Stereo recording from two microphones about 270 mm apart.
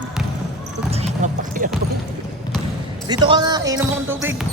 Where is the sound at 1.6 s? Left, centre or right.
Right.